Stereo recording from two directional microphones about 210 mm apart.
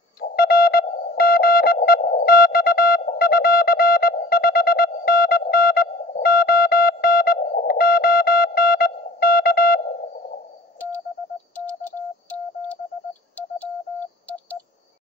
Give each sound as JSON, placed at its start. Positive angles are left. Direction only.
{"t": 0.2, "sound": "sidetone", "side_deg": 45}